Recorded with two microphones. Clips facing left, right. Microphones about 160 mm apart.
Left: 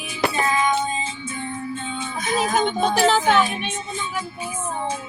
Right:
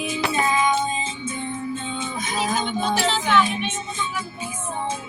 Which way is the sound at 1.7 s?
20° right (ahead or behind).